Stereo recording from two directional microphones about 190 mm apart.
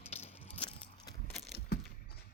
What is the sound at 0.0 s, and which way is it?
Keys jangling, 35° left (ahead or behind).